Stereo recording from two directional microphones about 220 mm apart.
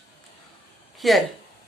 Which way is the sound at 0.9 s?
Centre (ahead or behind).